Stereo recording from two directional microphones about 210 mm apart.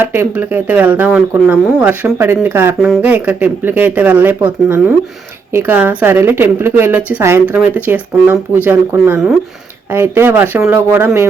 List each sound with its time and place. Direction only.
0.0 s speech: 10° right (ahead or behind)